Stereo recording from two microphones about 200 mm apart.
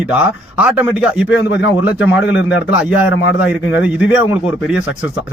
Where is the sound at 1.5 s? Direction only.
65° left (ahead or behind).